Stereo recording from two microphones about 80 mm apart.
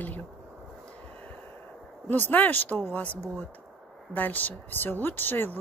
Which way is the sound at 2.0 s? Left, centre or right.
Left.